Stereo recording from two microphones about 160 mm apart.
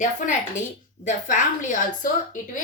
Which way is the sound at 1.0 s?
50° left (ahead or behind).